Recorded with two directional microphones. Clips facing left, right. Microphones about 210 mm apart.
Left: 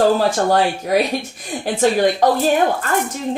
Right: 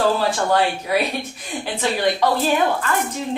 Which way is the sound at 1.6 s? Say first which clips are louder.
Left 6 dB; 45° left (ahead or behind).